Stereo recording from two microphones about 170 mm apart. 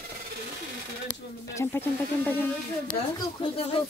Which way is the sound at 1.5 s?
15° left (ahead or behind).